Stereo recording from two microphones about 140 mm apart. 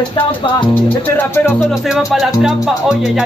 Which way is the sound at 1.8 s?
5° right (ahead or behind).